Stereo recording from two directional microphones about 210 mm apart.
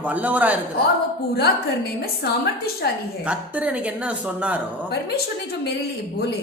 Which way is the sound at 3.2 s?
5° right (ahead or behind).